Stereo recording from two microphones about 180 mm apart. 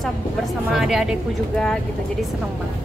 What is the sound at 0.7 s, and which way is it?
Speech, centre (ahead or behind).